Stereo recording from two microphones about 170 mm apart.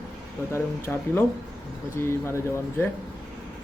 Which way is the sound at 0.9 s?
Centre (ahead or behind).